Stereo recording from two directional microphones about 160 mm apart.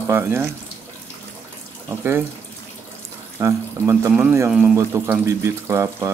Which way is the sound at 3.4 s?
15° right (ahead or behind).